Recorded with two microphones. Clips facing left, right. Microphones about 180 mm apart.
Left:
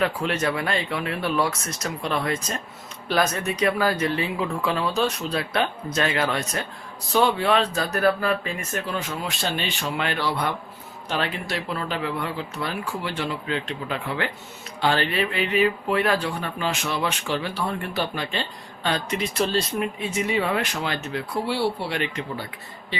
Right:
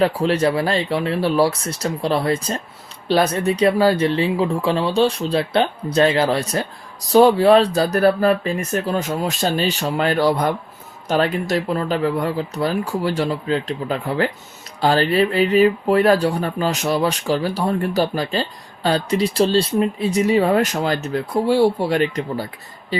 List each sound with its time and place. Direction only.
0.0 s speech: 35° right (ahead or behind)